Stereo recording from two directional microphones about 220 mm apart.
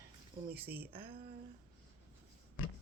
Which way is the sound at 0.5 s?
10° right (ahead or behind).